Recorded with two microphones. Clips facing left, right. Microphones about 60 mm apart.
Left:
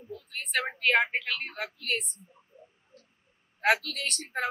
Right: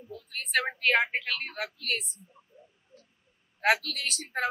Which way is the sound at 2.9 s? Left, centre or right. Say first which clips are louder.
Right 2 dB; left.